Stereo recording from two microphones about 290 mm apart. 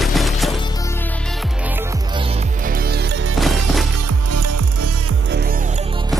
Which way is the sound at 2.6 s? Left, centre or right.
Right.